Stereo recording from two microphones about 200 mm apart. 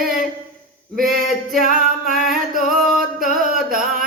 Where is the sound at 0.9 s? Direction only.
45° right (ahead or behind).